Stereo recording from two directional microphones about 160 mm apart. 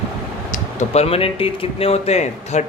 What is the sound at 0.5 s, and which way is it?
Speech, 45° left (ahead or behind).